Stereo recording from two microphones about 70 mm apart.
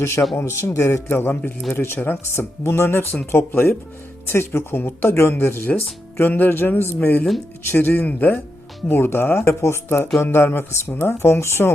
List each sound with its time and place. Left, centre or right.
0.0 s speech: left